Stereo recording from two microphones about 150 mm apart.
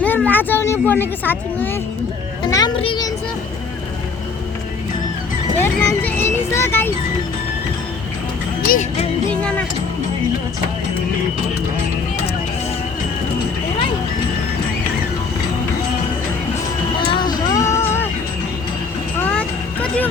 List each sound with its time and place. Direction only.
0.0 s speech: 10° left (ahead or behind)
2.4 s a child's voice: 25° left (ahead or behind)
2.7 s a child's voice: 35° left (ahead or behind)
5.5 s speech: 15° left (ahead or behind)
8.7 s music: 55° left (ahead or behind)
9.3 s a sound: 5° left (ahead or behind)
17.6 s music: 15° left (ahead or behind)
19.2 s vehicle: 10° left (ahead or behind)